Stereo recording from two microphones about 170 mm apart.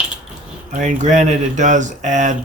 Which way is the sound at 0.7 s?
45° right (ahead or behind).